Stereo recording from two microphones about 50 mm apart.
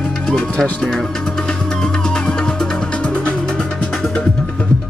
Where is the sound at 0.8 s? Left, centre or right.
Centre.